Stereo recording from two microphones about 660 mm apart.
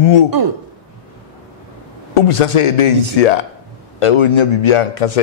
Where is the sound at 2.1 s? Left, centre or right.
Left.